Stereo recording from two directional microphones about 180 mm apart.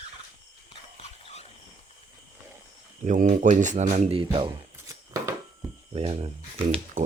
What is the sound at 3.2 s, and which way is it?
Speech, 45° right (ahead or behind).